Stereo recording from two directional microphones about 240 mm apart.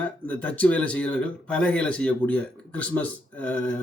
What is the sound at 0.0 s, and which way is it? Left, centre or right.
A man's voice, centre.